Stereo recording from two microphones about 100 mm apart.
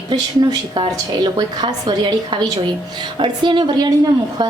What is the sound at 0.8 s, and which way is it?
A woman's voice, 45° right (ahead or behind).